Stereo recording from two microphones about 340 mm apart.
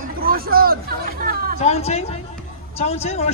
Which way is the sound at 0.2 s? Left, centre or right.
Right.